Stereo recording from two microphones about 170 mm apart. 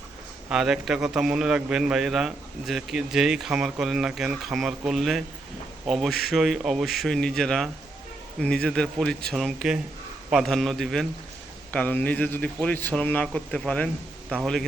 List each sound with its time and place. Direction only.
0.5 s a man's voice: 5° right (ahead or behind)